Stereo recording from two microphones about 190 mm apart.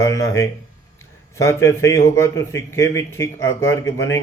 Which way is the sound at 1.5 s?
15° left (ahead or behind).